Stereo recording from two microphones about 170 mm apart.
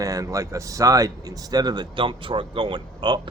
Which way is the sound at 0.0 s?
20° right (ahead or behind).